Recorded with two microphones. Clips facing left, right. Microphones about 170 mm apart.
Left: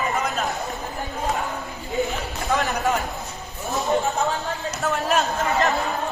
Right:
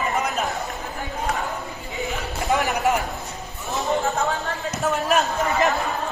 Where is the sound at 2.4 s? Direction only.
20° right (ahead or behind).